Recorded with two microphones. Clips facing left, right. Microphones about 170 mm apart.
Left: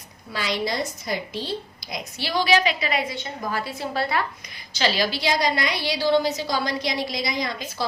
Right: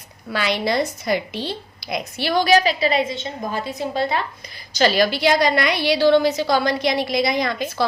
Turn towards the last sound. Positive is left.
turn(degrees=-65)  # may be behind; listen again after turning